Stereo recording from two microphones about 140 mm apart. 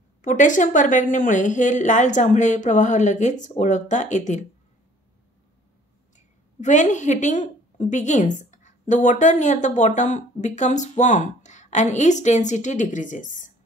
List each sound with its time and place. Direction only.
0.2 s a woman's voice: 65° left (ahead or behind)
6.1 s a woman's voice: 60° left (ahead or behind)